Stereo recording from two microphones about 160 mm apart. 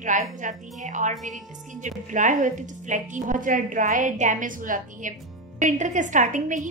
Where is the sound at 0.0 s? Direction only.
50° right (ahead or behind).